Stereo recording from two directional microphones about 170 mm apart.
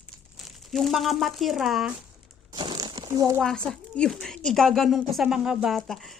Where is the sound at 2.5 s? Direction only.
25° right (ahead or behind).